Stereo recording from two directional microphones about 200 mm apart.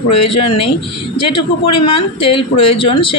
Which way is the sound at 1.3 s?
25° left (ahead or behind).